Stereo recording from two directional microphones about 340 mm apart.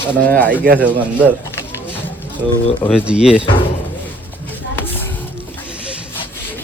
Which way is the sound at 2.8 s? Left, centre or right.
Centre.